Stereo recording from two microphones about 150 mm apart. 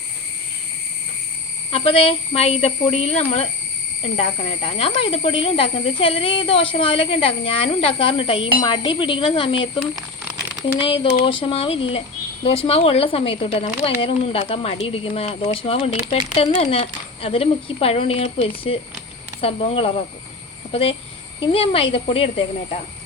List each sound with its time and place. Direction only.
1.7 s speech: 40° left (ahead or behind)